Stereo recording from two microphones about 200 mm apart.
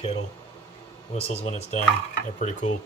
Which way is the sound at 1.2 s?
30° left (ahead or behind).